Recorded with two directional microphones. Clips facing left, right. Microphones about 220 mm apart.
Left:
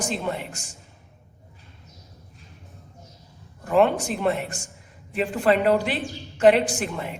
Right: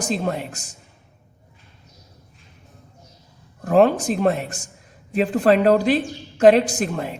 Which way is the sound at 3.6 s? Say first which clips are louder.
Right 4 dB; 40° right (ahead or behind).